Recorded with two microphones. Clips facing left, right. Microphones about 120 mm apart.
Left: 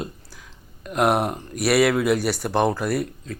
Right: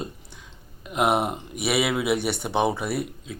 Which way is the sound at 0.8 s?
5° right (ahead or behind).